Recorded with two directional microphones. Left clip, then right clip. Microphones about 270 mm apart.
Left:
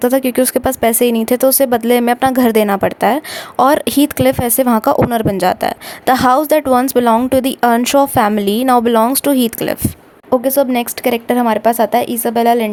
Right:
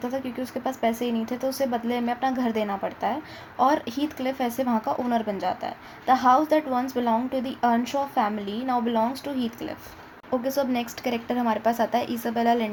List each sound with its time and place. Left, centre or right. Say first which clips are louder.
0.0 s speech: left 17 dB; left
10.4 s speech: left 10 dB; left